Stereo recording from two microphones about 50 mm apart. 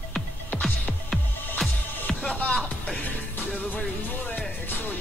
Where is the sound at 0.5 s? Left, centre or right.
Left.